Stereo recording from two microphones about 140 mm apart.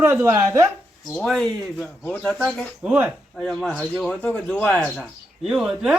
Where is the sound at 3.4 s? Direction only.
5° left (ahead or behind).